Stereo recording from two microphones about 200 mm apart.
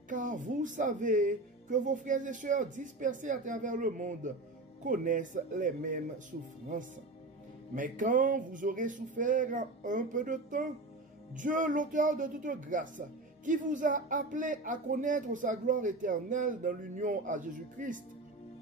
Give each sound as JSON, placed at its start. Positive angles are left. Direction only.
{"t": 0.1, "sound": "speech", "side_deg": -40}
{"t": 7.7, "sound": "speech", "side_deg": -40}